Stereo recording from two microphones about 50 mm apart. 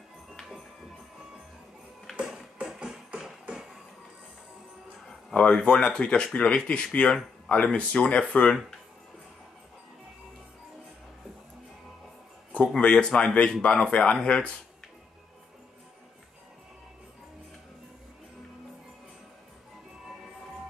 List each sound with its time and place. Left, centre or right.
2.1 s music: centre
5.3 s speech: left
12.7 s speech: left